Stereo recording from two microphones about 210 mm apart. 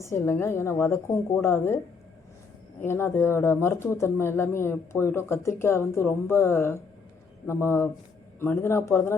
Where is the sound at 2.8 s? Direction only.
10° left (ahead or behind).